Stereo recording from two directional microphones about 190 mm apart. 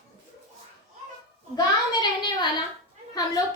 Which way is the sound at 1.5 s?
20° left (ahead or behind).